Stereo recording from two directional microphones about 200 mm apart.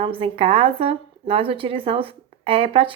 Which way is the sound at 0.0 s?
25° right (ahead or behind).